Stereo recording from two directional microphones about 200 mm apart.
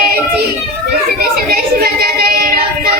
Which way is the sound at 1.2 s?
50° right (ahead or behind).